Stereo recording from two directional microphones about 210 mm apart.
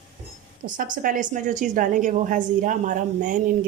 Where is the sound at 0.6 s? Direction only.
40° right (ahead or behind).